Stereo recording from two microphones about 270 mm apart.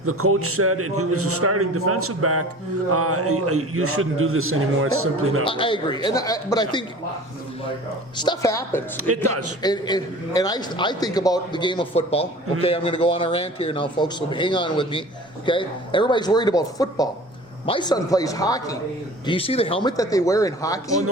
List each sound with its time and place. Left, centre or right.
0.0 s a man's voice: right
5.5 s a man's voice: centre
8.1 s a man's voice: centre
9.0 s a man's voice: right
9.6 s a man's voice: centre